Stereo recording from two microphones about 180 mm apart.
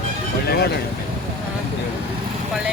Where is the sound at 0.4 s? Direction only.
65° left (ahead or behind).